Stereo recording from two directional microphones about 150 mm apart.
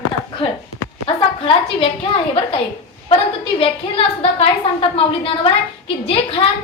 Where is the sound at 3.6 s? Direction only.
40° left (ahead or behind).